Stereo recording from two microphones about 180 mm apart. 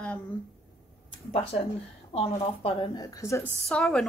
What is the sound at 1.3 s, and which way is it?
A woman's voice, 35° left (ahead or behind).